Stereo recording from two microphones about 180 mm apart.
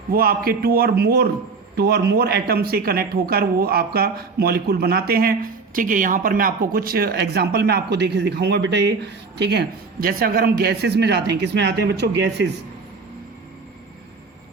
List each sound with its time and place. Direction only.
0.1 s speech: 55° right (ahead or behind)